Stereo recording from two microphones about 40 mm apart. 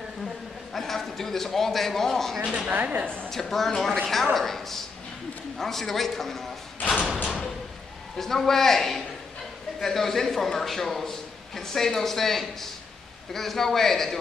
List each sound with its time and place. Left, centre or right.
0.7 s a man's voice: centre
2.4 s speech: right
2.7 s speech: right
3.3 s a man's voice: centre
8.2 s a man's voice: centre